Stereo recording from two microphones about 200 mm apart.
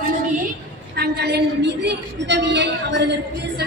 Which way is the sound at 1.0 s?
55° right (ahead or behind).